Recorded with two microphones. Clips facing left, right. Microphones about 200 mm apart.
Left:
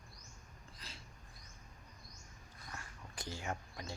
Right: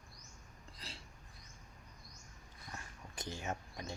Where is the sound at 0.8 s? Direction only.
30° right (ahead or behind).